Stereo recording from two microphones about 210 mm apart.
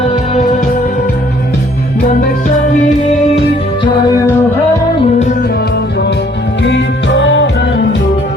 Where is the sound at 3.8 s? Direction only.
20° left (ahead or behind).